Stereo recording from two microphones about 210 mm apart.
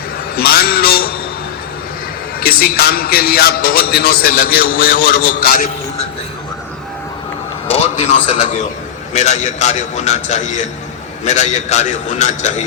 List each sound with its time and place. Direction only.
0.3 s a man's voice: 50° left (ahead or behind)
2.4 s a man's voice: 45° left (ahead or behind)
7.7 s a sound: 30° left (ahead or behind)
9.1 s a man's voice: 35° left (ahead or behind)